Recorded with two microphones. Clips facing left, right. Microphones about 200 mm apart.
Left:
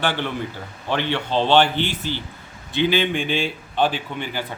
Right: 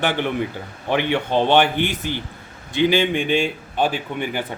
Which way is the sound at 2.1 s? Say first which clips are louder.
Right 1 dB; 55° right (ahead or behind).